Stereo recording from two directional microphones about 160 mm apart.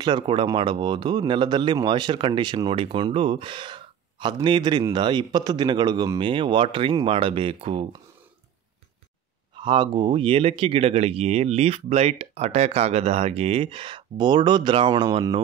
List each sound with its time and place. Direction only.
0.0 s speech: 30° right (ahead or behind)
9.6 s speech: 30° right (ahead or behind)